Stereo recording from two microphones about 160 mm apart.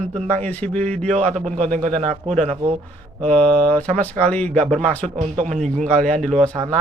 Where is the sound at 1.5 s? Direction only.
50° right (ahead or behind).